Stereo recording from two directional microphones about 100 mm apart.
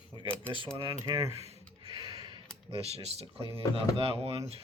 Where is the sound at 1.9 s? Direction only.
40° right (ahead or behind).